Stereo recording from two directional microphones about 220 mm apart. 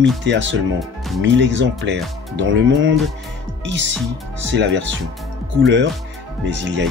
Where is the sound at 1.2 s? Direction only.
55° right (ahead or behind).